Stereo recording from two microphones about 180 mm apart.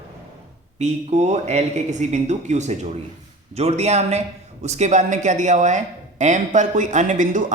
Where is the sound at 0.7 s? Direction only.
40° right (ahead or behind).